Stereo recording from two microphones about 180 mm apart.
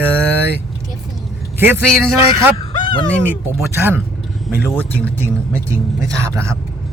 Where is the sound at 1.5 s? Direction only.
10° right (ahead or behind).